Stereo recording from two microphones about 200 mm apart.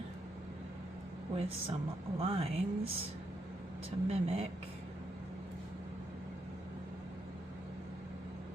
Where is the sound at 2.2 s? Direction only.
30° right (ahead or behind).